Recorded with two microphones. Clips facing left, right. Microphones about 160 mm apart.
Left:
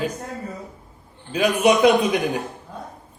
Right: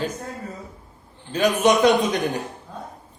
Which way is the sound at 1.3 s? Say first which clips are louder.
Left 1 dB; 10° left (ahead or behind).